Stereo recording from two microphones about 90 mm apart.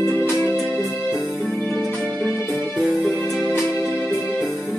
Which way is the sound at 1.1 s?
10° right (ahead or behind).